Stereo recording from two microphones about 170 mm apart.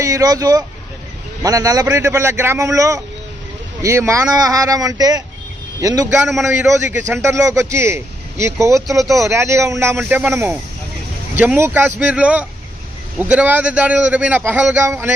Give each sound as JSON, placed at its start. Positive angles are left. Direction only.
{"t": 0.0, "sound": "a man's voice", "side_deg": -20}
{"t": 6.2, "sound": "a man's voice", "side_deg": -5}